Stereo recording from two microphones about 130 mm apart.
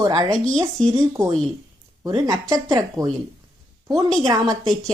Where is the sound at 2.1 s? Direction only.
35° right (ahead or behind).